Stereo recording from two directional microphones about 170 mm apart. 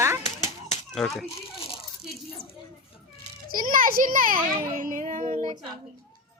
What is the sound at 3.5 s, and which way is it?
Children playing, 55° right (ahead or behind).